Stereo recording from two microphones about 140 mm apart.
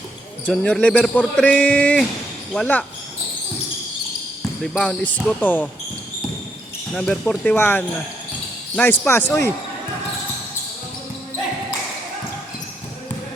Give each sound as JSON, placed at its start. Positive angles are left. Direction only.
{"t": 0.4, "sound": "speech", "side_deg": 5}
{"t": 4.8, "sound": "speech", "side_deg": 10}
{"t": 6.9, "sound": "speech", "side_deg": 5}